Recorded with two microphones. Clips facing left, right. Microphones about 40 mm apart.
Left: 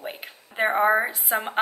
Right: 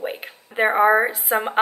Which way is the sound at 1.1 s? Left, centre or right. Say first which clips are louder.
Right 5 dB; centre.